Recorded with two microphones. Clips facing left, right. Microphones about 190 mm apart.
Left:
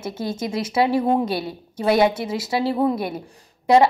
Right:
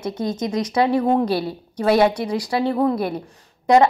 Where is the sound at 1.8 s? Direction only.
Centre (ahead or behind).